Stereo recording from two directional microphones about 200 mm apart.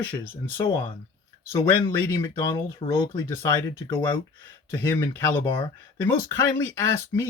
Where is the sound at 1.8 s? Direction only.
15° left (ahead or behind).